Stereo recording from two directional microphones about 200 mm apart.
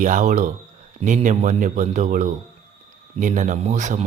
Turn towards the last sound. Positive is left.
turn(degrees=-35)  # may be behind; listen again after turning